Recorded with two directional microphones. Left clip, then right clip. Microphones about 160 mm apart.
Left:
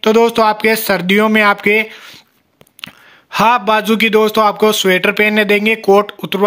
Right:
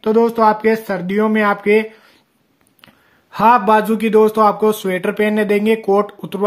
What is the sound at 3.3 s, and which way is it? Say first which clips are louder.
Speech: even; 15° left (ahead or behind).